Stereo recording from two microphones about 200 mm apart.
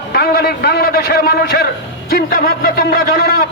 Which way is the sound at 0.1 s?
50° left (ahead or behind).